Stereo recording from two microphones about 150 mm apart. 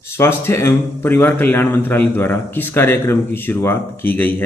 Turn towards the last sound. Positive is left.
turn(degrees=15)  # may be behind; listen again after turning